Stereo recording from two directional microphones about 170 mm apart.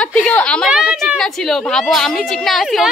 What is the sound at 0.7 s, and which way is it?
A woman's voice, 5° right (ahead or behind).